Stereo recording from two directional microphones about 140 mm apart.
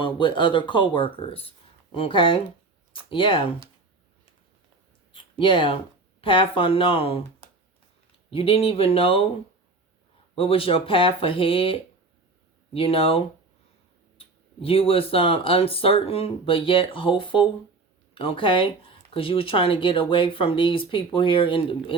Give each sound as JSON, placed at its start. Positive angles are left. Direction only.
{"t": 0.0, "sound": "speech", "side_deg": 35}
{"t": 5.1, "sound": "speech", "side_deg": 35}
{"t": 8.3, "sound": "speech", "side_deg": 40}
{"t": 10.3, "sound": "speech", "side_deg": 40}